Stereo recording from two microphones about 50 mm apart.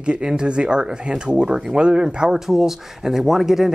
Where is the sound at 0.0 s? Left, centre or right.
Centre.